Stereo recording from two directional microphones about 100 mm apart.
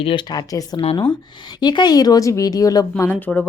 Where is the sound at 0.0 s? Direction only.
60° left (ahead or behind).